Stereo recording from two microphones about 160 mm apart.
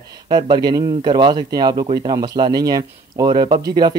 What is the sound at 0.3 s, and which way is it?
Speech, 30° right (ahead or behind).